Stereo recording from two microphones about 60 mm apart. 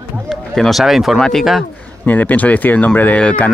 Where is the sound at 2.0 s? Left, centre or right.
Left.